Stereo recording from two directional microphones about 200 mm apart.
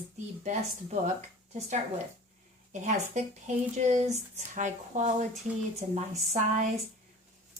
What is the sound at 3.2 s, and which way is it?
A woman's voice, 35° right (ahead or behind).